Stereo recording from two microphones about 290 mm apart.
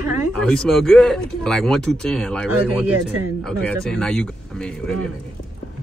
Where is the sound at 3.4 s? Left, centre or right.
Centre.